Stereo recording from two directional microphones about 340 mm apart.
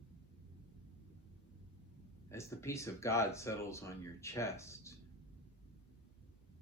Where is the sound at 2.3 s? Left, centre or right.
Centre.